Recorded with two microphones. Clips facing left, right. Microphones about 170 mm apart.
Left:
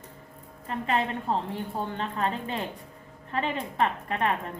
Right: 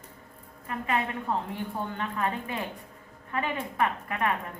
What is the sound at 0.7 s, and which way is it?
A woman's voice, 30° left (ahead or behind).